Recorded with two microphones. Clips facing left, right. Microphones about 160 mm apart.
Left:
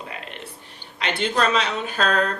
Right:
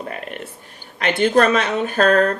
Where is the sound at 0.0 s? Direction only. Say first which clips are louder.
Right 6 dB; 50° right (ahead or behind).